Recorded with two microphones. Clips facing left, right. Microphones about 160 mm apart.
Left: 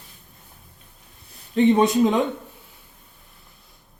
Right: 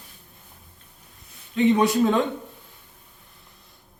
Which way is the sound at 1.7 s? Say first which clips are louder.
Even; 20° left (ahead or behind).